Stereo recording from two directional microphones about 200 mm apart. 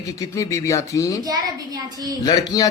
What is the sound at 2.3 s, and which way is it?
Speech, 20° left (ahead or behind).